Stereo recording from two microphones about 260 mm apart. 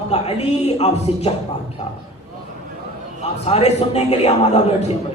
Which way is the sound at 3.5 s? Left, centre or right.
Left.